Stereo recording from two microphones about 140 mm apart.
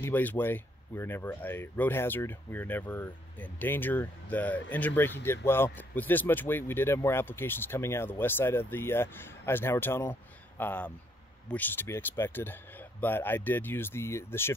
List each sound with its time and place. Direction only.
0.0 s speech: 15° left (ahead or behind)